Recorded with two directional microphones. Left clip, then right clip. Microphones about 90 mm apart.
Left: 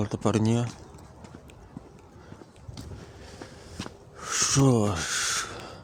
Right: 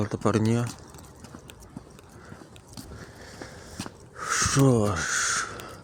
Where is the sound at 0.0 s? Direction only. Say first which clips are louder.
Right 1 dB; 15° left (ahead or behind).